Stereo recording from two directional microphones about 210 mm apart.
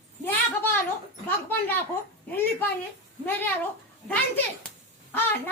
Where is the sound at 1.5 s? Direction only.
10° left (ahead or behind).